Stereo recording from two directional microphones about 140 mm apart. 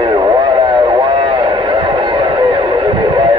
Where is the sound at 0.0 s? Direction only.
30° right (ahead or behind).